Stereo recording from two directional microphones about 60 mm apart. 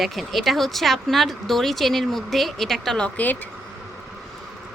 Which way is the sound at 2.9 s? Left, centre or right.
Centre.